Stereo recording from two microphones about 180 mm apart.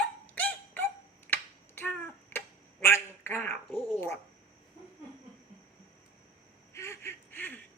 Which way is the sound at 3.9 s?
15° left (ahead or behind).